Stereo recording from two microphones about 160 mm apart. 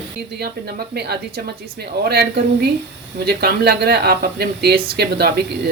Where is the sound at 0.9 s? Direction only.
90° right.